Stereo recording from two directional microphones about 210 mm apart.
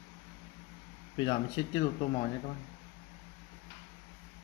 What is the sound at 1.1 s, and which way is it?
Speech, 25° left (ahead or behind).